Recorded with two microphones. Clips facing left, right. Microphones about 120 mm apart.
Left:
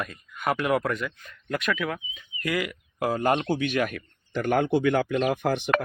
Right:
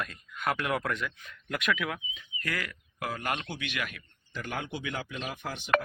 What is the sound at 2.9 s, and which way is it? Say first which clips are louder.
Speech: left 10 dB; 30° left (ahead or behind).